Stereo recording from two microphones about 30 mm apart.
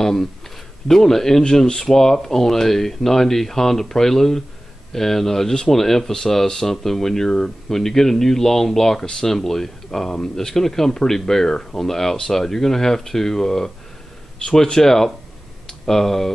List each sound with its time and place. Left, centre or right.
0.0 s speech: centre
9.0 s speech: left
9.3 s speech: centre